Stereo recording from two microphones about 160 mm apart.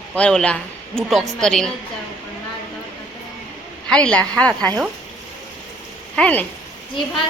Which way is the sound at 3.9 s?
5° left (ahead or behind).